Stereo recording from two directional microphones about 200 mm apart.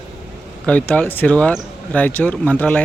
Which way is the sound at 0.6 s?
5° left (ahead or behind).